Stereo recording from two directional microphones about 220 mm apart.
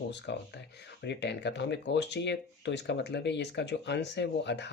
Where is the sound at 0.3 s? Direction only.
50° left (ahead or behind).